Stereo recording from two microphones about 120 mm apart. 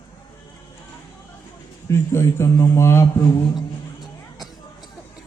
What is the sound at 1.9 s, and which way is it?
A man's voice, 20° left (ahead or behind).